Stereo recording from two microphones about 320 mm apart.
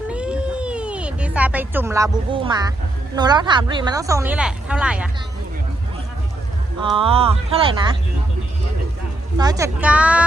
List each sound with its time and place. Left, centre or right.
0.1 s cat: centre
3.2 s speech: centre
6.9 s speech: centre
9.4 s speech: centre